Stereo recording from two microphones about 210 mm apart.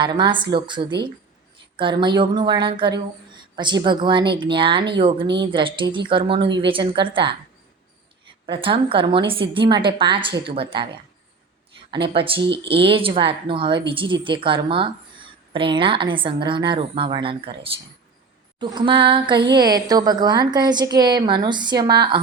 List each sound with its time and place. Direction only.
0.0 s speech: 20° right (ahead or behind)
8.4 s speech: 25° right (ahead or behind)
11.9 s speech: 25° right (ahead or behind)